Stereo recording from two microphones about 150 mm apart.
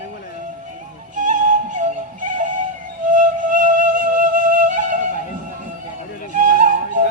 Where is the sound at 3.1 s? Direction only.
65° right (ahead or behind).